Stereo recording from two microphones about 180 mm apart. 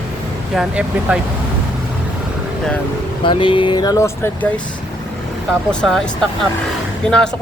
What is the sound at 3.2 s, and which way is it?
Speech, 30° left (ahead or behind).